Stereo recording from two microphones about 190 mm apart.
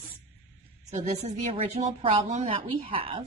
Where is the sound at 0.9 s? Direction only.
40° right (ahead or behind).